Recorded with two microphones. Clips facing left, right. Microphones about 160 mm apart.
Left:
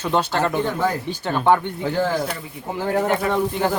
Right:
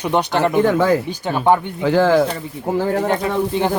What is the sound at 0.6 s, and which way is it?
Speech, 90° right.